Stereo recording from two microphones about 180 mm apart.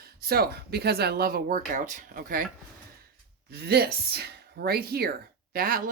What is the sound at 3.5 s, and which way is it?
Speech, 60° right (ahead or behind).